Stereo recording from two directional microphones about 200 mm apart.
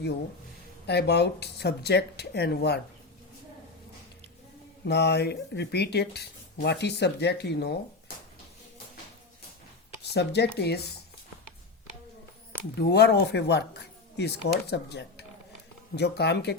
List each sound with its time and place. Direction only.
0.9 s speech: 55° left (ahead or behind)
4.9 s speech: 55° left (ahead or behind)
10.0 s speech: 55° left (ahead or behind)
12.8 s speech: 55° left (ahead or behind)